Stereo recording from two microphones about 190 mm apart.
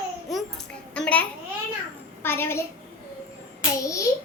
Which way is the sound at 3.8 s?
15° left (ahead or behind).